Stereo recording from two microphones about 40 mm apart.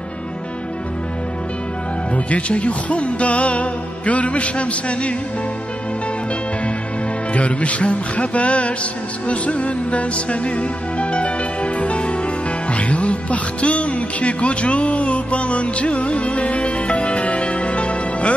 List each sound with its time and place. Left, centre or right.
2.1 s speech: left
7.3 s speech: left
9.3 s music: left
12.7 s speech: left